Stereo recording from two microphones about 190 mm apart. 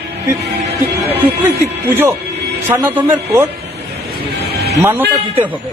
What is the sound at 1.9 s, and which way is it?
Speech, 10° right (ahead or behind).